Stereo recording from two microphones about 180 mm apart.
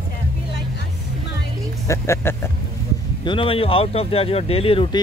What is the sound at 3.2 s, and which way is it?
Speech, 30° left (ahead or behind).